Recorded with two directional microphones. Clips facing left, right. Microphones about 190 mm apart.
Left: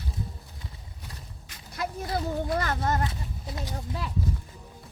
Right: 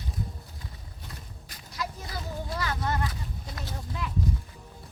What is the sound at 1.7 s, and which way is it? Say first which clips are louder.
Speech: left 6 dB; 55° left (ahead or behind).